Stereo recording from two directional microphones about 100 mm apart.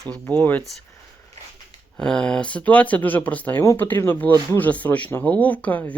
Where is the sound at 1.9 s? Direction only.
10° left (ahead or behind).